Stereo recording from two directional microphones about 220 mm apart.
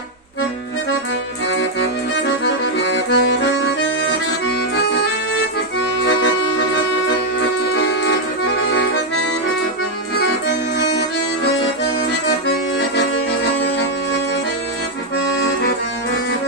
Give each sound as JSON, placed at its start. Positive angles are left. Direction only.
{"t": 1.5, "sound": "accordion", "side_deg": 55}
{"t": 7.3, "sound": "music", "side_deg": 50}
{"t": 10.2, "sound": "accordion", "side_deg": 50}
{"t": 13.0, "sound": "accordion", "side_deg": 50}